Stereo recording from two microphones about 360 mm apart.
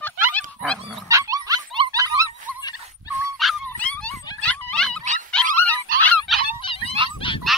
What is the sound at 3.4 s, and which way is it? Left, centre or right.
Dog, centre.